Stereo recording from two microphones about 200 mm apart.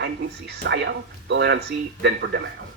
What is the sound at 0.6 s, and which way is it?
A man's voice, 60° right (ahead or behind).